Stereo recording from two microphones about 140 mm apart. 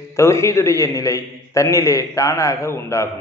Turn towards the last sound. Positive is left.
turn(degrees=20)  # may be behind; listen again after turning